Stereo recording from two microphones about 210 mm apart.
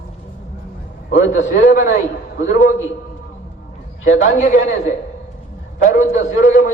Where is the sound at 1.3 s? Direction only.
35° left (ahead or behind).